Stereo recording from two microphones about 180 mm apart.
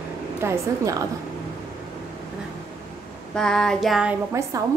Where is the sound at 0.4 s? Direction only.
15° right (ahead or behind).